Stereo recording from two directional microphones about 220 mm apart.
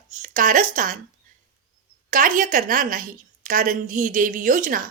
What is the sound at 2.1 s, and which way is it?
A woman's voice, 35° right (ahead or behind).